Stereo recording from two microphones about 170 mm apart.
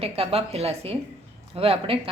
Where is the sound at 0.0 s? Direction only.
35° right (ahead or behind).